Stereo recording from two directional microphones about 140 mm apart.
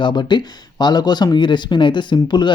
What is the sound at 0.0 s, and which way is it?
Speech, 30° left (ahead or behind).